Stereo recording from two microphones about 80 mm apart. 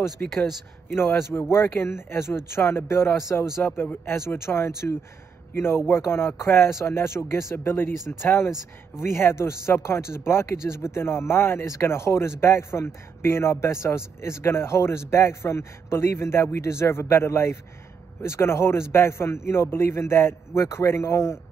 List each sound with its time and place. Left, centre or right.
0.2 s speech: centre
1.6 s speech: left
3.6 s a man's voice: left